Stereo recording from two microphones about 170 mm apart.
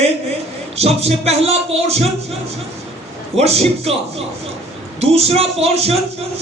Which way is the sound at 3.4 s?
35° right (ahead or behind).